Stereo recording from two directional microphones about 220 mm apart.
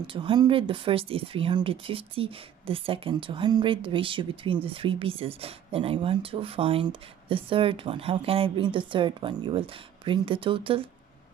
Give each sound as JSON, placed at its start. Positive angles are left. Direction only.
{"t": 0.0, "sound": "speech", "side_deg": -25}